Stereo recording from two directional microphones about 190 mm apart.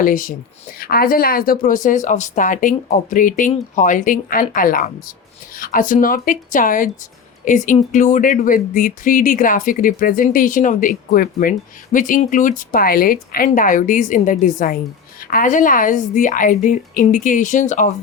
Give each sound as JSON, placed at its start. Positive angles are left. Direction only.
{"t": 0.0, "sound": "speech", "side_deg": 45}